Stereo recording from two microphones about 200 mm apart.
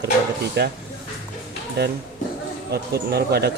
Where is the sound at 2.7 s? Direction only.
50° right (ahead or behind).